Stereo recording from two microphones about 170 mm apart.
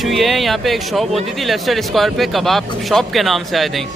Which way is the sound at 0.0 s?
Centre (ahead or behind).